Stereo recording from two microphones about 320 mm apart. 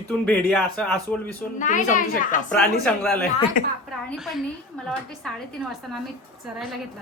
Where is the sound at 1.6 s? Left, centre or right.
Left.